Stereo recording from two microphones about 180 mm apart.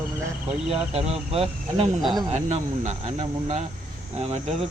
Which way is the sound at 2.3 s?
40° right (ahead or behind).